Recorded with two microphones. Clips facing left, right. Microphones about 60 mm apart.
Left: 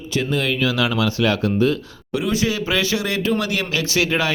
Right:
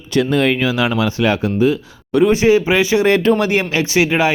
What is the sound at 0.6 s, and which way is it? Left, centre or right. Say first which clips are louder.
Speech: right 3 dB; right.